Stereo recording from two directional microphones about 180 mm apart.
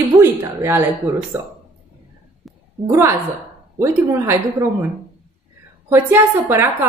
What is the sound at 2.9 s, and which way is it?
A woman's voice, 15° right (ahead or behind).